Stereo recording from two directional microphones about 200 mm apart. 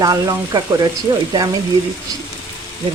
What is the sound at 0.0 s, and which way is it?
Speech, 20° right (ahead or behind).